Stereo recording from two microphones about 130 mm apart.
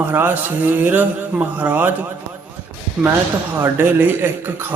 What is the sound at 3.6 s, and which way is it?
Mantra, 15° right (ahead or behind).